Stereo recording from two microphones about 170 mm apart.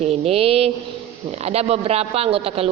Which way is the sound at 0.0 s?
35° right (ahead or behind).